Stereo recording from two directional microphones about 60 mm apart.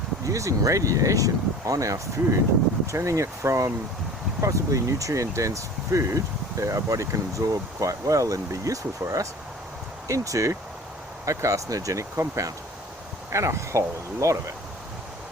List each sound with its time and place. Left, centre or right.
0.3 s speech: right